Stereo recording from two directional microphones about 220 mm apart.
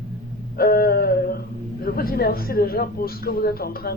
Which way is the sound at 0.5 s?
45° left (ahead or behind).